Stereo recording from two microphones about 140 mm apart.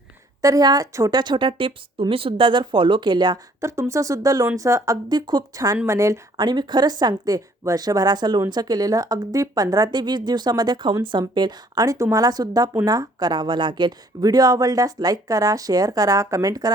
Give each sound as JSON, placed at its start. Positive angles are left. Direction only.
{"t": 0.4, "sound": "speech", "side_deg": -25}